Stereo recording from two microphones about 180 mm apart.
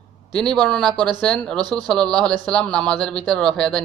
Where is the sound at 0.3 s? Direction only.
5° left (ahead or behind).